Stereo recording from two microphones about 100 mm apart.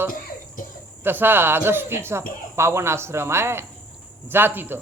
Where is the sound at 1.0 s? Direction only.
20° right (ahead or behind).